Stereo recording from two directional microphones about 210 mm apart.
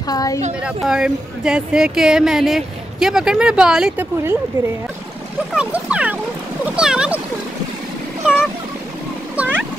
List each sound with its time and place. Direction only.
0.1 s a woman's voice: 15° left (ahead or behind)
0.7 s speech: 5° right (ahead or behind)
5.5 s speech: 5° right (ahead or behind)
9.4 s a sound: 5° right (ahead or behind)